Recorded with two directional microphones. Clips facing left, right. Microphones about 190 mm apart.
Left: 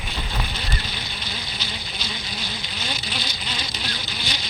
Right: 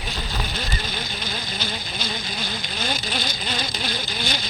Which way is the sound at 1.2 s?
50° right (ahead or behind).